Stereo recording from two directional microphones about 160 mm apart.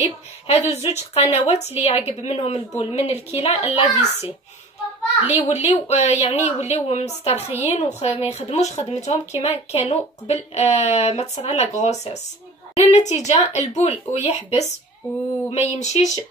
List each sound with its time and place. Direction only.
0.0 s a woman's voice: 40° left (ahead or behind)
5.7 s a woman's voice: 45° left (ahead or behind)